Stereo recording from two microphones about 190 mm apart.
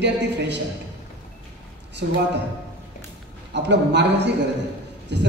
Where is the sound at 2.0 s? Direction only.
60° right (ahead or behind).